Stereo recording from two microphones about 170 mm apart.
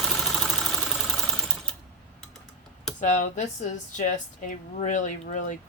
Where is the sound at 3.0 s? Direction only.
45° left (ahead or behind).